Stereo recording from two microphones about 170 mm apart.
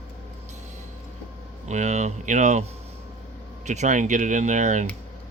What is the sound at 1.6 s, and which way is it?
Speech, 45° right (ahead or behind).